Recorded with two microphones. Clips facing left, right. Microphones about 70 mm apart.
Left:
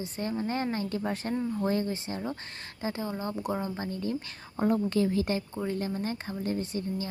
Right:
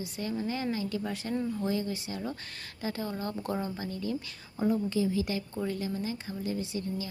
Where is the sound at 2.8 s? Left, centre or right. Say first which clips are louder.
Left 1 dB; left.